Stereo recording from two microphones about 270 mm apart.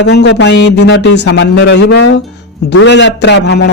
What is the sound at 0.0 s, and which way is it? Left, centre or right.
Speech, left.